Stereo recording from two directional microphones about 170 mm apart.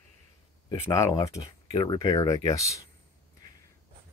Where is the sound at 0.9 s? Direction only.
20° left (ahead or behind).